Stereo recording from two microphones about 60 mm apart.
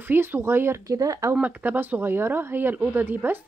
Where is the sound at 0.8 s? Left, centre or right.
Right.